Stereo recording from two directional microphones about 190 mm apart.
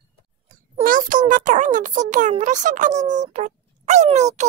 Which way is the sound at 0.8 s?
45° right (ahead or behind).